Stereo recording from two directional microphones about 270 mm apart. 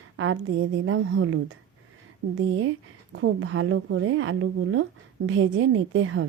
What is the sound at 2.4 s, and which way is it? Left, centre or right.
A woman's voice, right.